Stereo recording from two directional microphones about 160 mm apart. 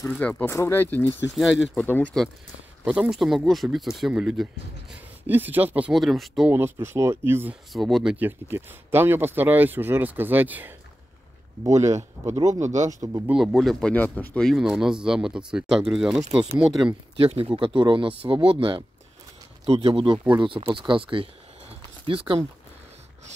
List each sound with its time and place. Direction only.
0.2 s speech: 10° left (ahead or behind)
2.8 s speech: 5° right (ahead or behind)
6.5 s speech: 15° right (ahead or behind)
7.7 s speech: centre (ahead or behind); by 12.6 s 20° right (ahead or behind)
12.6 s speech: 45° right (ahead or behind)
13.3 s speech: 5° right (ahead or behind)
17.2 s speech: 35° right (ahead or behind)